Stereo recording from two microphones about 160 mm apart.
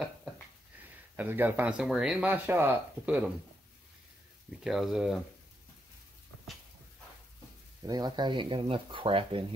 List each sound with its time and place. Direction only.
0.7 s speech: 10° right (ahead or behind)
4.6 s speech: centre (ahead or behind)
7.8 s speech: 25° right (ahead or behind)